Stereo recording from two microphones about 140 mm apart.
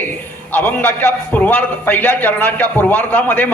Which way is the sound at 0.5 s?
15° left (ahead or behind).